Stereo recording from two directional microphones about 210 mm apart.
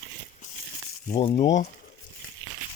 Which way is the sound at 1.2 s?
25° left (ahead or behind).